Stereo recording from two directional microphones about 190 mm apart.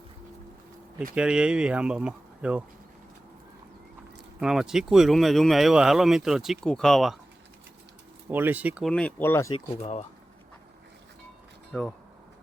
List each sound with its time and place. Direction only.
0.9 s speech: 5° right (ahead or behind)
4.4 s speech: 5° right (ahead or behind)
8.3 s speech: 10° right (ahead or behind)
8.9 s speech: 5° left (ahead or behind)
9.5 s speech: 35° left (ahead or behind)
11.7 s speech: centre (ahead or behind)